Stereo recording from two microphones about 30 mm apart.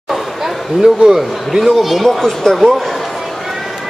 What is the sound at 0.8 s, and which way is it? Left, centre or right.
Speech, centre.